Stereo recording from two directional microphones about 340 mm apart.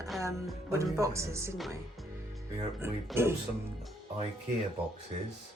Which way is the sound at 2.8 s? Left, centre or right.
Centre.